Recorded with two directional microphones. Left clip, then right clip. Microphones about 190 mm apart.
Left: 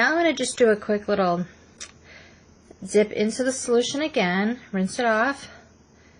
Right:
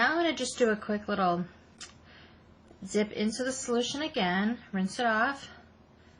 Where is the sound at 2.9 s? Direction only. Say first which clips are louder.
Left 10 dB; 45° left (ahead or behind).